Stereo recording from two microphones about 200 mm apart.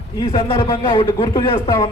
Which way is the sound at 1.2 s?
15° left (ahead or behind).